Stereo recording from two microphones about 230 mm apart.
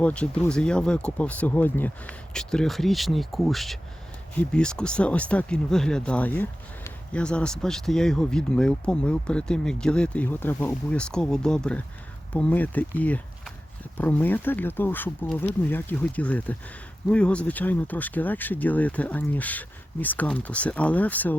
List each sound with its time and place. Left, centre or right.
0.0 s speech: centre